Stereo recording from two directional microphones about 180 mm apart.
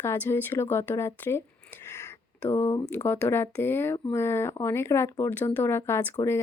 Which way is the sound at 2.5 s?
15° left (ahead or behind).